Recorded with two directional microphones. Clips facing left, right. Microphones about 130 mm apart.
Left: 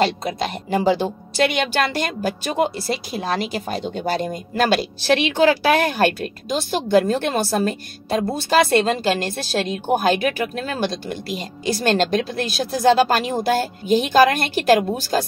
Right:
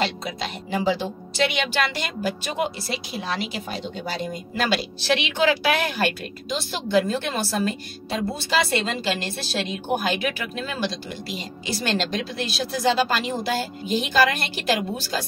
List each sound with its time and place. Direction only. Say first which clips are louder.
0.0 s a woman's voice: left 6 dB; 45° left (ahead or behind)